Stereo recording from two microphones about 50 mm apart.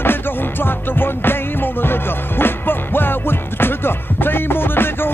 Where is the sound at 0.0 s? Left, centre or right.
Left.